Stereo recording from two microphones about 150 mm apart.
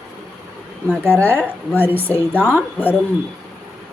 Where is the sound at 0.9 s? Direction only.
15° right (ahead or behind).